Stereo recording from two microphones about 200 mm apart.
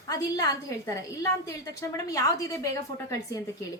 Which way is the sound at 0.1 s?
20° left (ahead or behind).